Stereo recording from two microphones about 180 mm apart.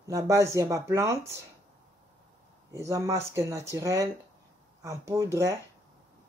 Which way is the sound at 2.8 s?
15° right (ahead or behind).